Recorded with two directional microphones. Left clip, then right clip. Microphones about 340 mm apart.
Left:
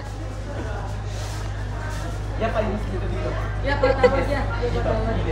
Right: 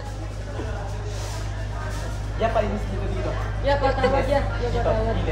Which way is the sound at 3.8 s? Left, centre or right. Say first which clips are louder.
Left 8 dB; centre.